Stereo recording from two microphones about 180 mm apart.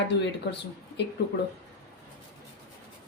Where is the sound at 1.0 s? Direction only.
70° left (ahead or behind).